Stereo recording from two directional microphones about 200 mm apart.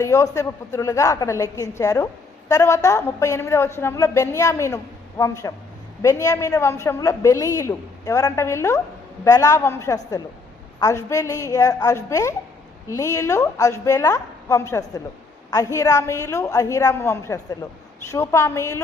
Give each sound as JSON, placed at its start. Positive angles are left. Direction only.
{"t": 0.0, "sound": "a woman's voice", "side_deg": 15}